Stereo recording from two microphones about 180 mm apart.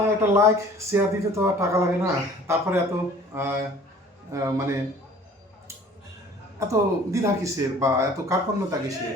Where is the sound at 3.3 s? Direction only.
15° right (ahead or behind).